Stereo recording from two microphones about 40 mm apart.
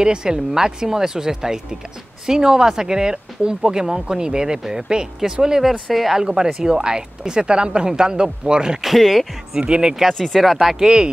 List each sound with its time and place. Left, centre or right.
0.0 s speech: centre
8.8 s speech: centre
9.6 s speech: right
10.1 s speech: centre
10.8 s speech: right